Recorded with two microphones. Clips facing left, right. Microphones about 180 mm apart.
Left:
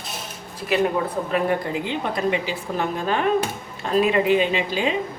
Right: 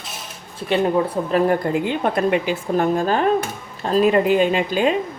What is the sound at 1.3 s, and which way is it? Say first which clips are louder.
Speech: right 5 dB; 50° right (ahead or behind).